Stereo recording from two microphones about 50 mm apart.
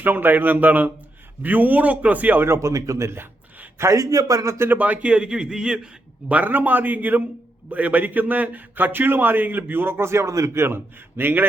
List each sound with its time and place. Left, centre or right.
0.0 s a man's voice: right
2.4 s a man's voice: right
4.4 s speech: right
4.7 s a man's voice: right
5.1 s speech: centre
6.2 s a man's voice: right
11.2 s a man's voice: right